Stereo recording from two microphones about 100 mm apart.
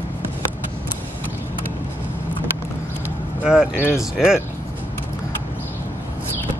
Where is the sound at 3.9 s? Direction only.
5° right (ahead or behind).